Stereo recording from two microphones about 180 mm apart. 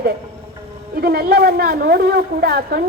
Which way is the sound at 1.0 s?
60° right (ahead or behind).